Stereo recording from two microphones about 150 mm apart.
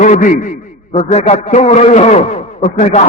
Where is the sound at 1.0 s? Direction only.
45° left (ahead or behind).